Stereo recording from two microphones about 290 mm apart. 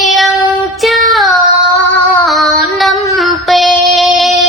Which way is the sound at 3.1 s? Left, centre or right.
Centre.